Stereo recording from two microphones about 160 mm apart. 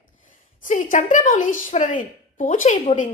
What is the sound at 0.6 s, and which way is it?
A woman's voice, 55° left (ahead or behind).